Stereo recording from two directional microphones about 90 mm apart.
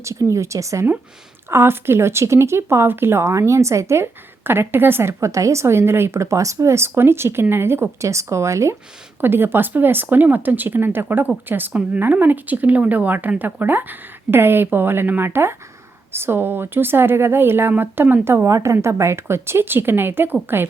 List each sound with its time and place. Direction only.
0.0 s speech: 35° right (ahead or behind)
18.4 s speech: 35° right (ahead or behind)